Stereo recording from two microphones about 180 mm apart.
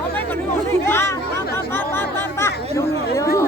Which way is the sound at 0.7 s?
15° left (ahead or behind).